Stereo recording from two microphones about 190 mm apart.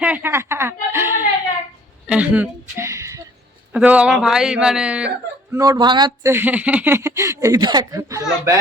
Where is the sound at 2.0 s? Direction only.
5° right (ahead or behind).